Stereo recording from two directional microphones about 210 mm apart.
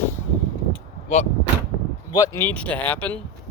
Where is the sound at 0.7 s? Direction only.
30° left (ahead or behind).